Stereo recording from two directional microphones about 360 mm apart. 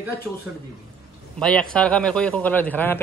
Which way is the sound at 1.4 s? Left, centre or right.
Centre.